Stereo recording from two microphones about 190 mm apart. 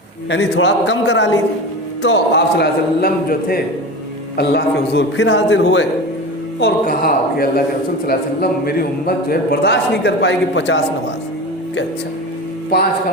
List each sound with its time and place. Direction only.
0.3 s a man's voice: 65° left (ahead or behind)
6.6 s a man's voice: 55° left (ahead or behind); by 10.8 s 70° left (ahead or behind)